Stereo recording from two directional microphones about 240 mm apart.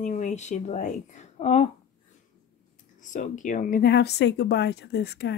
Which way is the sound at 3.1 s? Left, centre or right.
Left.